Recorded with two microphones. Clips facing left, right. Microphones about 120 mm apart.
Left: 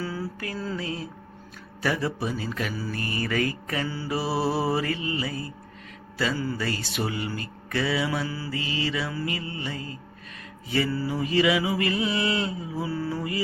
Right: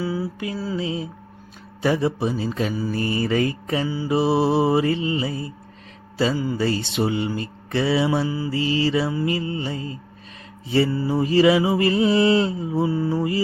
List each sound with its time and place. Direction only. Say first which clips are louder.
0.0 s mantra: right 6 dB; 10° right (ahead or behind)
6.3 s speech: right 5 dB; 15° right (ahead or behind)
6.6 s mantra: right 7 dB; 25° right (ahead or behind)